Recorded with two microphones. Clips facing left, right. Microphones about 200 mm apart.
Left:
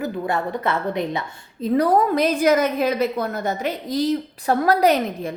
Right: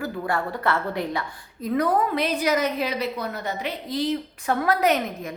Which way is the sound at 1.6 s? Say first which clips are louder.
Left 5 dB; 35° left (ahead or behind).